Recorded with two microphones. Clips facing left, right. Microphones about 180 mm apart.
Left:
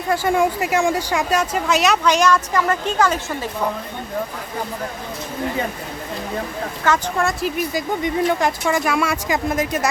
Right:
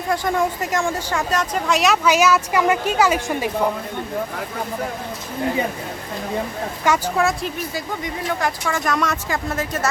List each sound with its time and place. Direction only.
0.1 s speech: 5° left (ahead or behind); by 3.5 s 10° right (ahead or behind)
6.8 s speech: 5° right (ahead or behind)
7.7 s speech: 20° left (ahead or behind)
8.8 s speech: 10° left (ahead or behind)